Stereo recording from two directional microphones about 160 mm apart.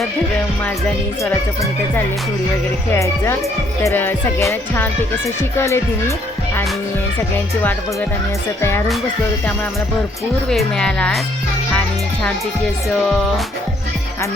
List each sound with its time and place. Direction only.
2.9 s speech: 15° left (ahead or behind)
10.5 s speech: 5° left (ahead or behind)